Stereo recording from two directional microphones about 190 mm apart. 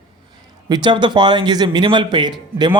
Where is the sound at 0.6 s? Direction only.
20° right (ahead or behind).